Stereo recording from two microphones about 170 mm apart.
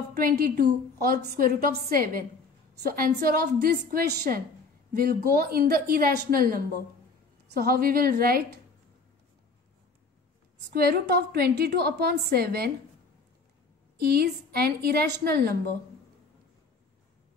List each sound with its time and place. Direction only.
0.1 s a woman's voice: 60° right (ahead or behind)
10.7 s a woman's voice: 65° right (ahead or behind)
14.1 s a woman's voice: 65° right (ahead or behind)